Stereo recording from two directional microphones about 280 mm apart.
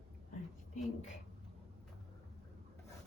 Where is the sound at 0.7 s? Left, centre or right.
Left.